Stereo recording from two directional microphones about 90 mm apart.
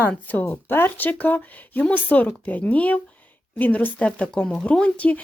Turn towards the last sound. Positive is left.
turn(degrees=15)  # may be behind; listen again after turning